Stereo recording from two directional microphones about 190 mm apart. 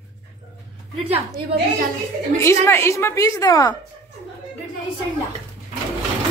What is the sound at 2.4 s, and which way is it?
Speech, 15° left (ahead or behind).